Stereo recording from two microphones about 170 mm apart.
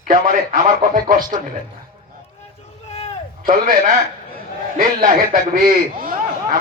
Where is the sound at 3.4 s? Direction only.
50° right (ahead or behind).